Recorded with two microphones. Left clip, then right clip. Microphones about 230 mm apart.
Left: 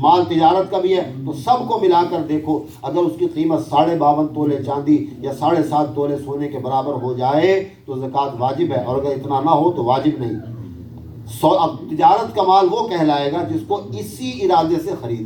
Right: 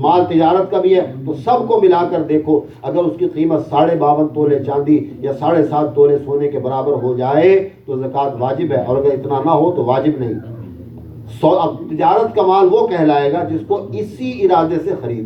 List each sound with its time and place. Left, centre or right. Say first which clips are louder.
0.0 s a man's voice: right 1 dB; left
11.3 s a man's voice: right 2 dB; left